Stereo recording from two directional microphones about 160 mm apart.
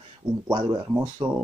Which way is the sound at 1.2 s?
30° right (ahead or behind).